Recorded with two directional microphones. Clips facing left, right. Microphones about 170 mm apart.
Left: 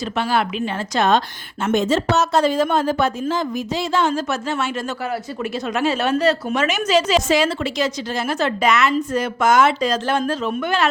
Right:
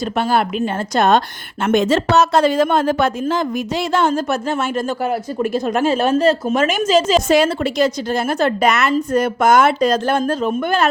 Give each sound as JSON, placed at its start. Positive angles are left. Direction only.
{"t": 0.0, "sound": "speech", "side_deg": -45}
{"t": 1.6, "sound": "speech", "side_deg": -90}
{"t": 3.9, "sound": "speech", "side_deg": -50}